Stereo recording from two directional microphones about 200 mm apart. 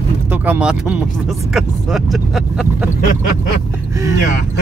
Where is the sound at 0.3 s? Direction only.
5° right (ahead or behind).